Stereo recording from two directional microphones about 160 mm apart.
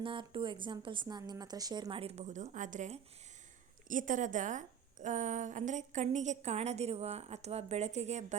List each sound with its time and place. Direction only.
0.0 s a woman's voice: 30° right (ahead or behind)